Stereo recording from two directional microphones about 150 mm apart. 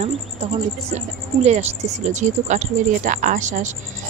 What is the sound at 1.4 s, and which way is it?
Speech, 45° right (ahead or behind).